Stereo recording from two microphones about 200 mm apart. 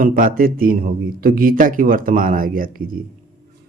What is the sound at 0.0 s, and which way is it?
Speech, 45° right (ahead or behind).